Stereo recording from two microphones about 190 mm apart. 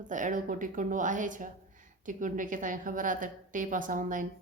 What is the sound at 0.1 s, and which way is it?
A woman's voice, 40° right (ahead or behind).